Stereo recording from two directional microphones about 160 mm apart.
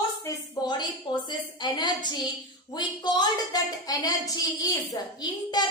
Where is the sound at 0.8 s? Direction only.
30° left (ahead or behind).